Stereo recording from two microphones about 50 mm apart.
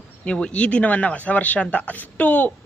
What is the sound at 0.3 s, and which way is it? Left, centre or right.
A woman's voice, left.